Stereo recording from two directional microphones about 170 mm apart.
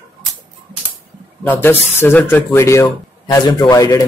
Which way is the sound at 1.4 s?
10° left (ahead or behind).